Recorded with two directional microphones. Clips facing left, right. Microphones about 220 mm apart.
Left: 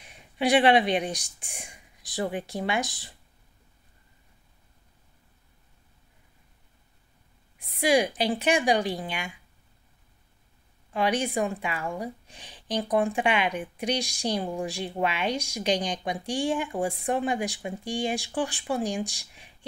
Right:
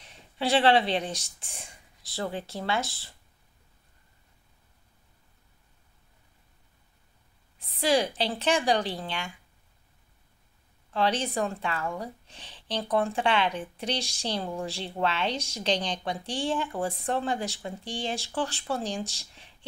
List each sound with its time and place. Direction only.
0.0 s speech: 15° left (ahead or behind)
7.5 s speech: 10° left (ahead or behind)
10.9 s speech: 15° left (ahead or behind)